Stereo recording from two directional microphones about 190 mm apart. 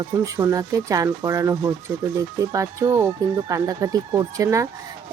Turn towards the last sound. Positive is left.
turn(degrees=-15)  # may be behind; listen again after turning